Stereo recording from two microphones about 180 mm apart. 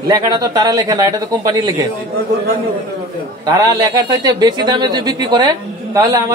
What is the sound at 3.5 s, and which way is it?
Speech, 20° right (ahead or behind).